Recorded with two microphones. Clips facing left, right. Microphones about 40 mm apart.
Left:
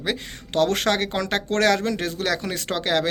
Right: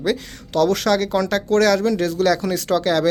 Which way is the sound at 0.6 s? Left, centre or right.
Left.